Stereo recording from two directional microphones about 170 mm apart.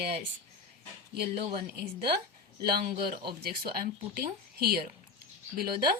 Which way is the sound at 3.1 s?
65° right (ahead or behind).